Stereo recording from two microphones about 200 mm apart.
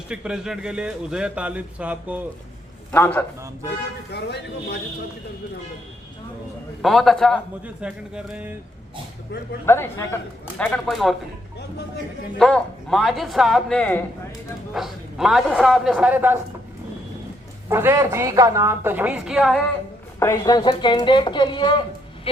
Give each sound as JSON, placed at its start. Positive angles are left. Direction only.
{"t": 0.1, "sound": "speech", "side_deg": -5}
{"t": 2.9, "sound": "a woman's voice", "side_deg": 10}
{"t": 4.1, "sound": "speech", "side_deg": 55}
{"t": 6.8, "sound": "speech", "side_deg": 0}
{"t": 9.3, "sound": "speech", "side_deg": 55}
{"t": 9.6, "sound": "a woman's voice", "side_deg": 10}
{"t": 12.4, "sound": "speech", "side_deg": 5}
{"t": 17.7, "sound": "a woman's voice", "side_deg": -10}
{"t": 20.1, "sound": "a woman's voice", "side_deg": 15}